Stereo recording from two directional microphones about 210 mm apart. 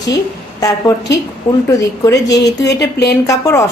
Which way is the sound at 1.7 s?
15° left (ahead or behind).